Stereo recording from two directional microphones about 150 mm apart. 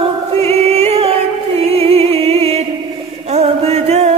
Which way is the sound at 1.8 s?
40° right (ahead or behind).